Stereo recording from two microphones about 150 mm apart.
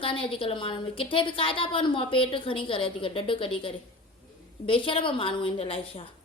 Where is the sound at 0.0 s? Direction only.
35° left (ahead or behind).